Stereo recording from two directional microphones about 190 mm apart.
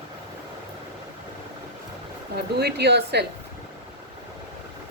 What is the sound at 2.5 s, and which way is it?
Speech, 60° right (ahead or behind).